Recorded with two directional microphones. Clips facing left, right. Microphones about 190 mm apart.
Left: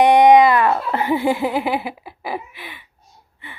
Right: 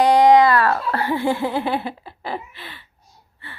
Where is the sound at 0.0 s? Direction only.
20° left (ahead or behind).